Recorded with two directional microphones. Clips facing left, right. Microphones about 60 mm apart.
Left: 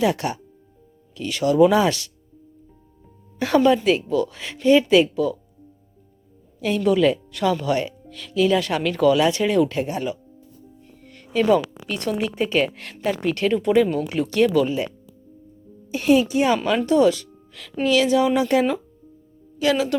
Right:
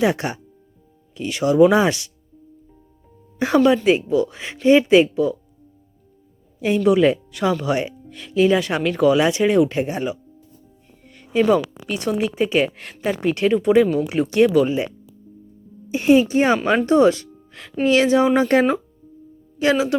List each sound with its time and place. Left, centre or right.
0.0 s speech: right
3.3 s speech: centre
6.7 s speech: centre
7.7 s speech: centre
8.6 s speech: centre
11.0 s music: centre
11.4 s speech: centre; by 14.8 s right
15.9 s speech: right
16.3 s speech: right
18.3 s speech: right
19.7 s speech: centre